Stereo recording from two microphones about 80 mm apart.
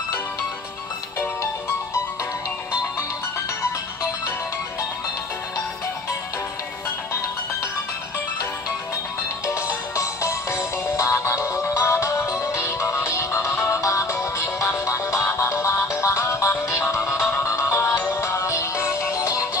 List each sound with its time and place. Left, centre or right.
9.9 s music: left